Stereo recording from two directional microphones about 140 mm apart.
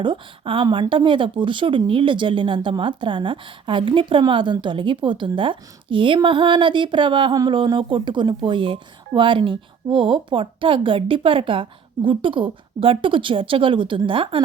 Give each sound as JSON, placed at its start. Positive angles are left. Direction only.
{"t": 0.0, "sound": "a woman's voice", "side_deg": -35}